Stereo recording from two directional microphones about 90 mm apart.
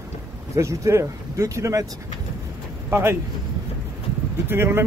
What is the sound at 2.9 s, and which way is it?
Speech, 30° right (ahead or behind).